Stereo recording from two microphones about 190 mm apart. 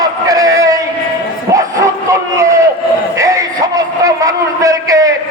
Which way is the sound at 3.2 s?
15° right (ahead or behind).